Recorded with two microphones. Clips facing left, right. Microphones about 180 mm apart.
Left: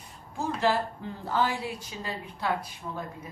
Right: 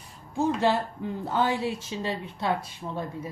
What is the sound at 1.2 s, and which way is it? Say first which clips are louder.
A woman's voice: right 2 dB; 20° right (ahead or behind).